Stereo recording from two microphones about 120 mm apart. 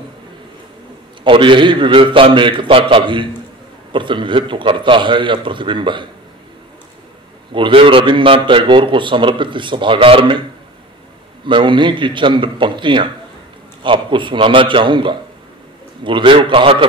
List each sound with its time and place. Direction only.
1.2 s a man's voice: 40° right (ahead or behind)
7.5 s a man's voice: 45° right (ahead or behind)
11.4 s a man's voice: 40° right (ahead or behind)